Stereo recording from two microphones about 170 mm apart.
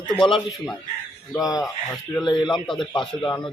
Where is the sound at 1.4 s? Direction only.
20° left (ahead or behind).